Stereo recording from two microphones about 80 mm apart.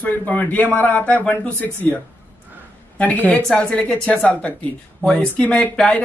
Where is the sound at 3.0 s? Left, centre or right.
Centre.